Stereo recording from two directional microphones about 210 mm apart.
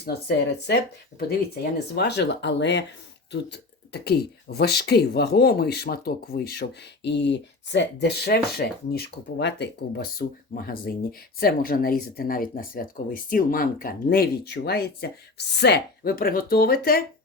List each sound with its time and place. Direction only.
0.0 s speech: 50° left (ahead or behind)
2.0 s speech: 55° left (ahead or behind)